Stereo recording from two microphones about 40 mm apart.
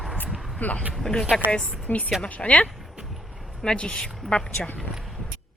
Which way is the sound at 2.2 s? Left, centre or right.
Left.